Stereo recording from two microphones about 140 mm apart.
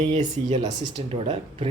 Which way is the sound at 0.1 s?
55° right (ahead or behind).